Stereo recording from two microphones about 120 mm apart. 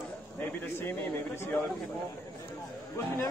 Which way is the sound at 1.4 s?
15° left (ahead or behind).